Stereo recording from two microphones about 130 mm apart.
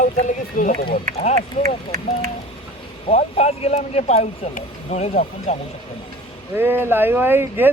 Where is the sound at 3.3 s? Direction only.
50° left (ahead or behind).